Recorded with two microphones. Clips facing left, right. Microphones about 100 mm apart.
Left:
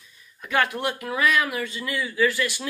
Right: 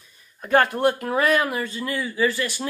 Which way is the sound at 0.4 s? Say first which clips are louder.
Right 5 dB; 40° right (ahead or behind).